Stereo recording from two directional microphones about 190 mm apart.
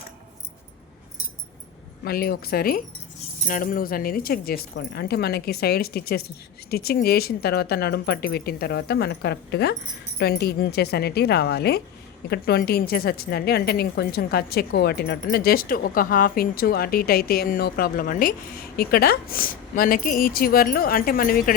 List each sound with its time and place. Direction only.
2.0 s a woman's voice: 55° left (ahead or behind)